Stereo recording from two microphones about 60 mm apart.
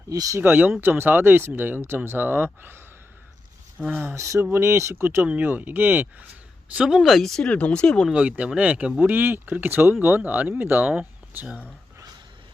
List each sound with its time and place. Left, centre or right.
0.1 s speech: right
0.3 s speech: right
3.8 s speech: centre
4.1 s speech: right
5.2 s speech: right
6.7 s speech: centre
7.4 s speech: centre
8.1 s speech: centre
9.0 s speech: right